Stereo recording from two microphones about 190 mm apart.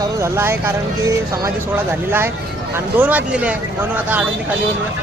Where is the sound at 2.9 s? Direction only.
10° right (ahead or behind).